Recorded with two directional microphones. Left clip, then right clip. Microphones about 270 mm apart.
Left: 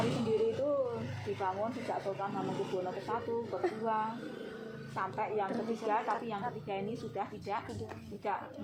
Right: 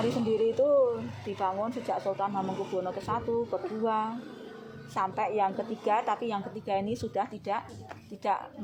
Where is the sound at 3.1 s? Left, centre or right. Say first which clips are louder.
Right 7 dB; right.